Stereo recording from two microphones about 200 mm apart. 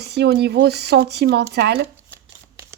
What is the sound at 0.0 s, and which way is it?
Speech, 55° right (ahead or behind).